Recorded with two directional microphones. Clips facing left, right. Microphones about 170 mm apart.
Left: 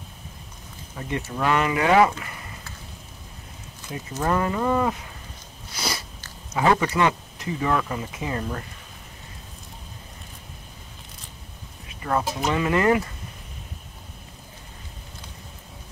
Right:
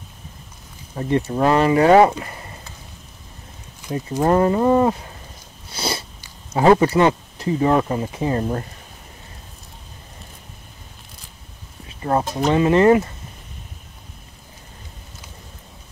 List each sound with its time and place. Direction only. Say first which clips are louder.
0.9 s speech: right 9 dB; 35° right (ahead or behind)
3.8 s a sound: right 8 dB; 15° right (ahead or behind)
4.2 s speech: right 7 dB; 35° right (ahead or behind)
5.7 s biting: right 5 dB; 30° right (ahead or behind)
6.5 s speech: right 7 dB; 30° right (ahead or behind)
12.0 s speech: right 5 dB; 30° right (ahead or behind)